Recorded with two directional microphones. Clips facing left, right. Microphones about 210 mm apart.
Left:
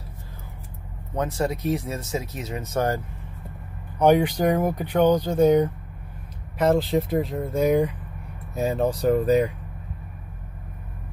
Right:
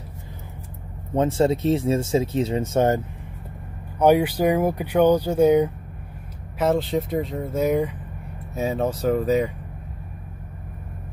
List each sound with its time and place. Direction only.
1.1 s speech: 25° right (ahead or behind)
4.0 s speech: 5° right (ahead or behind)